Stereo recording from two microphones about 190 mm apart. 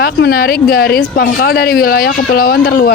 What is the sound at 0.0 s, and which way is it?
Speech, 55° left (ahead or behind).